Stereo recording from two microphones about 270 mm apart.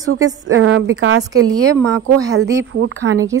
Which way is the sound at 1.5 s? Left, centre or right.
Centre.